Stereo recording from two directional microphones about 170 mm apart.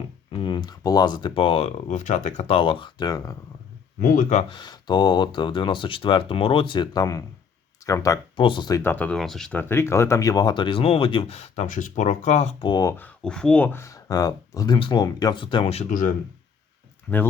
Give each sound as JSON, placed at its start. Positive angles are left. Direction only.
{"t": 0.3, "sound": "speech", "side_deg": 30}
{"t": 4.0, "sound": "speech", "side_deg": 50}
{"t": 4.4, "sound": "speech", "side_deg": 25}
{"t": 8.8, "sound": "speech", "side_deg": 10}
{"t": 12.6, "sound": "speech", "side_deg": 20}